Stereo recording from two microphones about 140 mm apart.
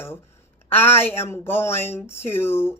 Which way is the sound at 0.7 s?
15° left (ahead or behind).